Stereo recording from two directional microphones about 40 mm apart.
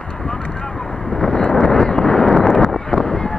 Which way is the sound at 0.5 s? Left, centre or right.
Centre.